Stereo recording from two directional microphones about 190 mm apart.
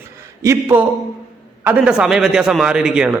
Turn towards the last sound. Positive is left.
turn(degrees=-5)  # may be behind; listen again after turning